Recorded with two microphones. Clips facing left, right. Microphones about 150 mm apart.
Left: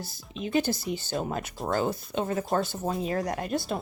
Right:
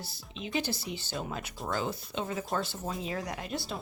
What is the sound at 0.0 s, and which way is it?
Speech, 45° left (ahead or behind).